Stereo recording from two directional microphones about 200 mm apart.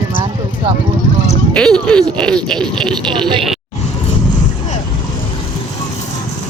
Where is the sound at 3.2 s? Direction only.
25° right (ahead or behind).